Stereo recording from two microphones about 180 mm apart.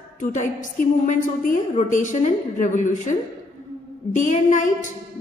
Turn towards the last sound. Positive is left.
turn(degrees=45)  # may be behind; listen again after turning